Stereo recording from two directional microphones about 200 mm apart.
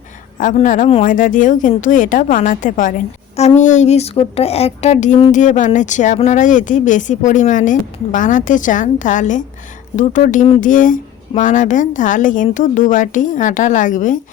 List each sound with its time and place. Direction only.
0.3 s a woman's voice: 40° left (ahead or behind)